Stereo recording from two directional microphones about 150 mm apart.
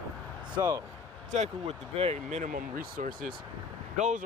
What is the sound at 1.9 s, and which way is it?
Speech, 45° right (ahead or behind).